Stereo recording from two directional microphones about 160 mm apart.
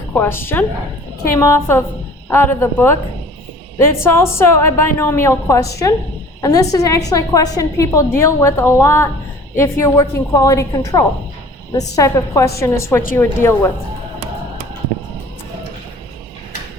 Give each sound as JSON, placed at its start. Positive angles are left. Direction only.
{"t": 0.1, "sound": "a woman's voice", "side_deg": 15}